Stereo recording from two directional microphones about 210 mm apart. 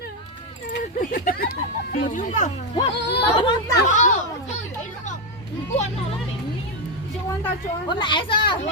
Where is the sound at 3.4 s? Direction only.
20° left (ahead or behind).